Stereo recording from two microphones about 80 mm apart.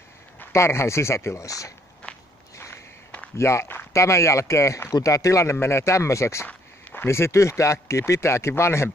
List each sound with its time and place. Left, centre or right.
0.5 s speech: left
2.5 s walk: left
3.3 s speech: left
6.4 s a sound: left
7.1 s speech: left